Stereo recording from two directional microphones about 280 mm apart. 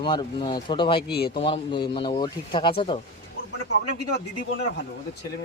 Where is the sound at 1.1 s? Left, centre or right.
Left.